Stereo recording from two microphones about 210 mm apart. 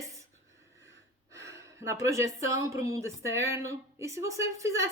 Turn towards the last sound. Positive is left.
turn(degrees=-15)  # may be behind; listen again after turning